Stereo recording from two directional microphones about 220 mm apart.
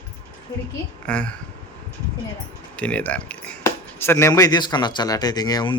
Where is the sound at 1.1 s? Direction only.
5° left (ahead or behind).